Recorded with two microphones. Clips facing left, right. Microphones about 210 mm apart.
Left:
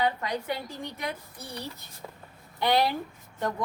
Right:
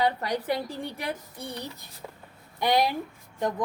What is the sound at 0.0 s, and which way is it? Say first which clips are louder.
Speech: right 2 dB; 35° right (ahead or behind).